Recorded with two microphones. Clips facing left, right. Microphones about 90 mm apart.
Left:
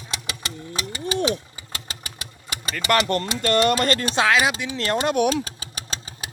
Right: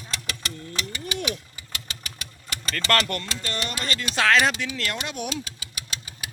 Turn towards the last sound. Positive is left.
turn(degrees=35)  # may be behind; listen again after turning